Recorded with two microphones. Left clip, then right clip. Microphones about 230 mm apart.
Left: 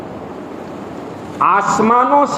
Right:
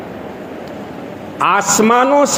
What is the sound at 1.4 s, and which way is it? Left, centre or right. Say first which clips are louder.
Speech: even; right.